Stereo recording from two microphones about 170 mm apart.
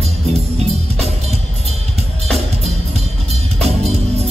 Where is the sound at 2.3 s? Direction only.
40° right (ahead or behind).